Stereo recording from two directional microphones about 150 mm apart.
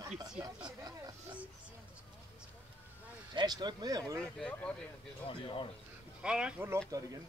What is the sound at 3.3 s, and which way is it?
Speech, 30° right (ahead or behind).